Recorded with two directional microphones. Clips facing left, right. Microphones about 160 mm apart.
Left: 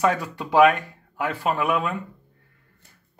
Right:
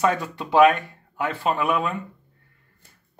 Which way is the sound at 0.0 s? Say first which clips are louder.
Even; 10° left (ahead or behind).